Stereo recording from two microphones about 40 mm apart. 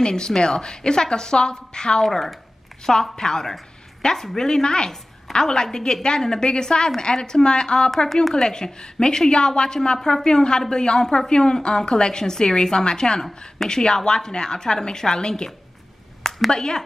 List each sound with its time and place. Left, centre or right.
0.0 s a woman's voice: centre
2.0 s a woman's voice: centre; by 7.9 s left
8.1 s a woman's voice: centre
8.5 s a woman's voice: centre
16.2 s a sound: centre